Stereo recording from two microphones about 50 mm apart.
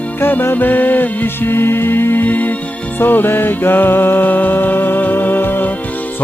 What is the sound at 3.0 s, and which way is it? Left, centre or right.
Music, left.